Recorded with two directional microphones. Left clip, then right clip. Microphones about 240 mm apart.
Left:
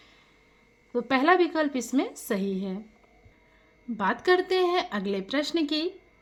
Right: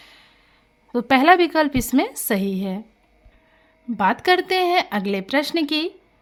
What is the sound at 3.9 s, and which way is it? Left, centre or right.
A woman's voice, right.